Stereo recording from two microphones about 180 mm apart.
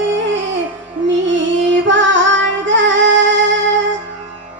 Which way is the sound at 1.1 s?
90° right.